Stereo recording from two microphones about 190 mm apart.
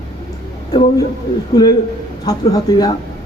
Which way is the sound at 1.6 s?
20° left (ahead or behind).